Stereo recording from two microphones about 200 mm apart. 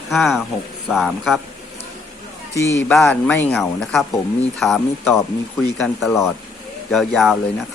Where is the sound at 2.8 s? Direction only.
5° left (ahead or behind).